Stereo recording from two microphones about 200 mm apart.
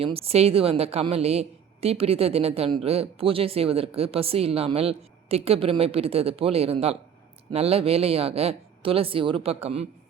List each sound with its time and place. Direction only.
0.0 s speech: 30° right (ahead or behind)